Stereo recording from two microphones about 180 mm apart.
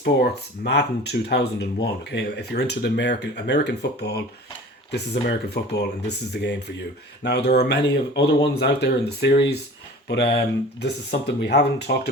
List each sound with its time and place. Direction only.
0.0 s speech: 65° left (ahead or behind)